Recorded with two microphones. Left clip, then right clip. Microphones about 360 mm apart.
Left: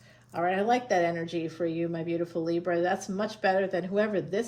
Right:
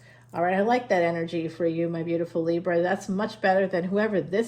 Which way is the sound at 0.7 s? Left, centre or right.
Right.